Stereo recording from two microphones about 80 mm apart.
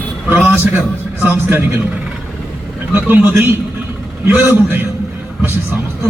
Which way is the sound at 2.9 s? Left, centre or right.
Right.